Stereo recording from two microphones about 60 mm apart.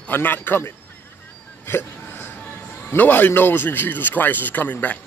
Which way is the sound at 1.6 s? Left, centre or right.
Left.